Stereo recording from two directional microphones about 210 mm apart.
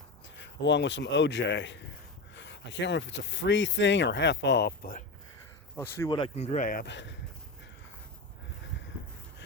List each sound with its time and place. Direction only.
0.3 s speech: 60° left (ahead or behind)
5.7 s speech: 10° left (ahead or behind)
6.1 s speech: 25° left (ahead or behind); by 7.2 s 60° left (ahead or behind)